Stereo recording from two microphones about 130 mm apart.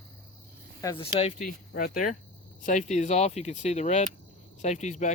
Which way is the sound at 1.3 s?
90° left.